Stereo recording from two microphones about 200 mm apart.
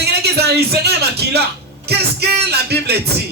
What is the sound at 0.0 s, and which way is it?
Music, 55° right (ahead or behind).